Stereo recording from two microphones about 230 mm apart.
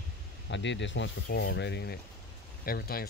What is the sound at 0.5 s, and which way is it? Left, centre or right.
Speech, left.